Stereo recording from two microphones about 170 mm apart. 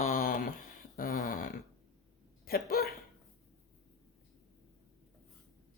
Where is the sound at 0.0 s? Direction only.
50° left (ahead or behind).